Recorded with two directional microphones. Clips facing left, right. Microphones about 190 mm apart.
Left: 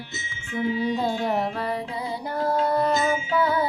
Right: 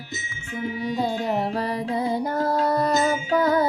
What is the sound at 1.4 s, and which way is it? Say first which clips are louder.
Music: right 2 dB; 35° right (ahead or behind).